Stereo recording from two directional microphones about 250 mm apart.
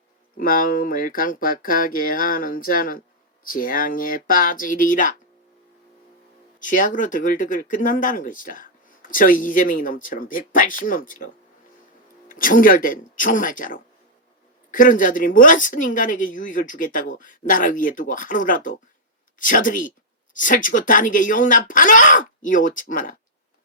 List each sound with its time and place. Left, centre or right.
0.3 s speech: left
6.6 s speech: left
12.3 s speech: left